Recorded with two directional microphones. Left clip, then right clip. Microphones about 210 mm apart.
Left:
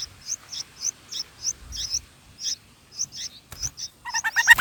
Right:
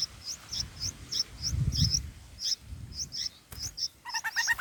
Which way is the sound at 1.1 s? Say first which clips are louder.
Right 1 dB; 15° left (ahead or behind).